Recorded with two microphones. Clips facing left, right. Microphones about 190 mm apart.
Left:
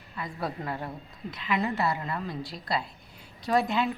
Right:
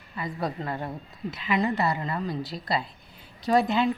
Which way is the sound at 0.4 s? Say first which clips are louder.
Right 2 dB; 5° left (ahead or behind).